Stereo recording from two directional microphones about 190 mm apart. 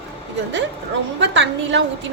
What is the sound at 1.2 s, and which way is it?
Speech, 70° right (ahead or behind).